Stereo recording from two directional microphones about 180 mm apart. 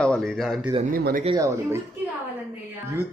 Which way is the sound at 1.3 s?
15° right (ahead or behind).